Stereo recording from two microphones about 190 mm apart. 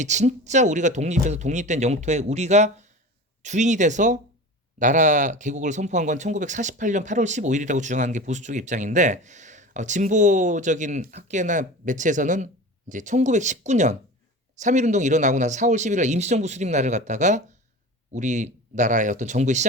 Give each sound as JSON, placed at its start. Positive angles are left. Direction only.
{"t": 0.0, "sound": "speech", "side_deg": -40}